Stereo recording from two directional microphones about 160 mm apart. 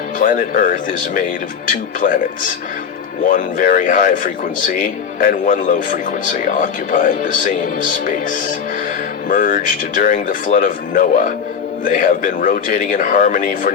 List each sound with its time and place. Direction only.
0.2 s speech: 55° left (ahead or behind)
3.2 s a man's voice: 55° left (ahead or behind)
9.3 s speech: 55° left (ahead or behind)